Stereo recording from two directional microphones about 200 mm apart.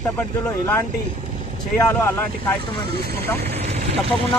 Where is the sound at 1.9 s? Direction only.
10° left (ahead or behind).